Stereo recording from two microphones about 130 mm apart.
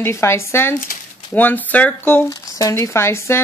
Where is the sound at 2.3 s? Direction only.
25° left (ahead or behind).